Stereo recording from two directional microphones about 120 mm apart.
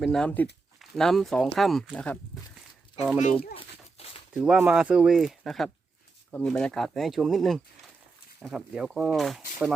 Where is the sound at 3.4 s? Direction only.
55° left (ahead or behind).